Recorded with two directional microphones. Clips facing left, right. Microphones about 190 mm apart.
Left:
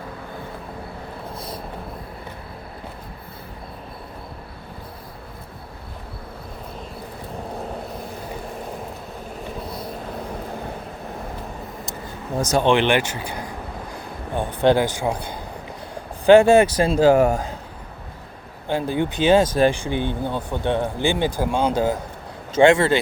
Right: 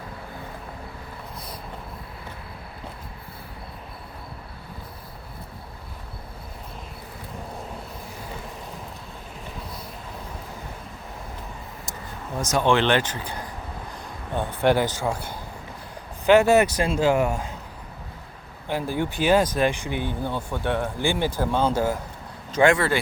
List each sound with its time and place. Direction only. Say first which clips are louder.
12.4 s speech: left 4 dB; 35° left (ahead or behind)
12.6 s a man's voice: left 1 dB; 15° left (ahead or behind)
16.2 s speech: left 5 dB; 30° left (ahead or behind)
18.7 s speech: left 4 dB; 20° left (ahead or behind)